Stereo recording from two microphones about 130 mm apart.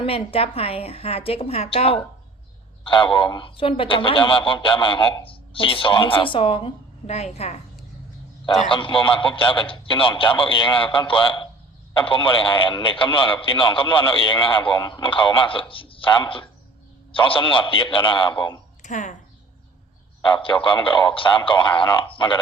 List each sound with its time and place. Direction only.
0.0 s speech: 45° left (ahead or behind)
8.6 s speech: 40° left (ahead or behind)
18.8 s speech: 70° left (ahead or behind)
20.2 s speech: 40° left (ahead or behind)